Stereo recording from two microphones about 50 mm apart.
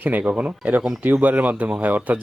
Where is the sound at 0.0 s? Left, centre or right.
Right.